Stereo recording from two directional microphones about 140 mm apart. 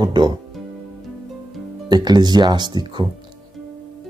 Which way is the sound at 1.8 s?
30° right (ahead or behind).